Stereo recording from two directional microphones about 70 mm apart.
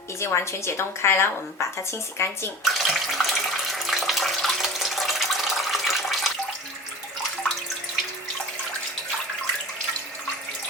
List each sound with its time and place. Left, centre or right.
0.2 s speech: left
2.6 s bathtub: centre